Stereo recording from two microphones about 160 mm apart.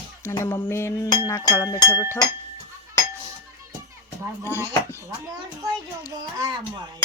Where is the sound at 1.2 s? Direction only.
20° left (ahead or behind).